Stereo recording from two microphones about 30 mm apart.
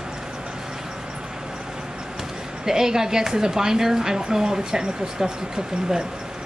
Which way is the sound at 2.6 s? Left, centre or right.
Centre.